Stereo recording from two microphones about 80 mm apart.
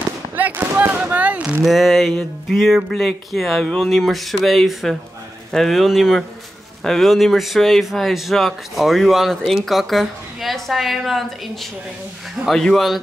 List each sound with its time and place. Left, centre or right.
0.4 s speech: right
1.6 s speech: centre
12.4 s speech: centre